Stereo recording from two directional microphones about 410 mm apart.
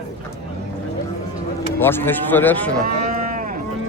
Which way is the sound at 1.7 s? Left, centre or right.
Centre.